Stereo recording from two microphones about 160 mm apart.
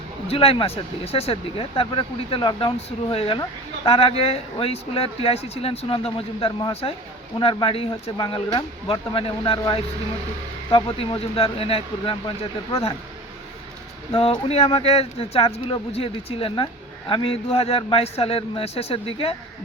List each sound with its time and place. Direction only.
0.3 s speech: 35° left (ahead or behind)
14.1 s speech: 35° left (ahead or behind)